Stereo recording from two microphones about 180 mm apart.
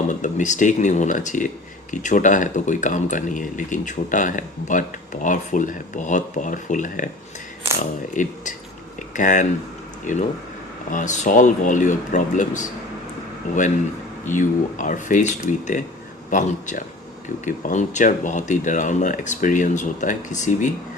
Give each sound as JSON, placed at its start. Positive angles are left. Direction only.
{"t": 0.1, "sound": "speech", "side_deg": 45}
{"t": 8.1, "sound": "speech", "side_deg": 45}
{"t": 14.3, "sound": "speech", "side_deg": 45}